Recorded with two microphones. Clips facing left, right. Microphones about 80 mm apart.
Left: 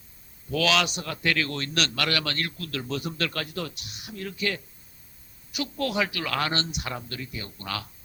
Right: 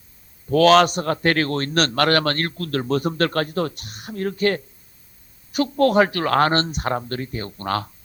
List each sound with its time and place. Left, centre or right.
0.5 s a man's voice: right